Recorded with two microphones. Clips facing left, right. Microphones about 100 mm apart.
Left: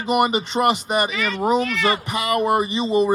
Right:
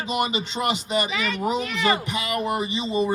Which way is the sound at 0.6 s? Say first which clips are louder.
Left 7 dB; 50° left (ahead or behind).